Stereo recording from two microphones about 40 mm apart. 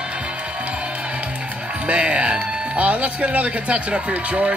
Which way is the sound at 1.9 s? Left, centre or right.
Right.